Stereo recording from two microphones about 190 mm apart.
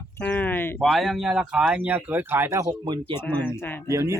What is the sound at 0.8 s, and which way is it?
Speech, centre (ahead or behind).